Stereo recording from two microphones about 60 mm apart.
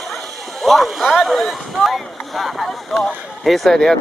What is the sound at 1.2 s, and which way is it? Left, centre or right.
Speech, centre.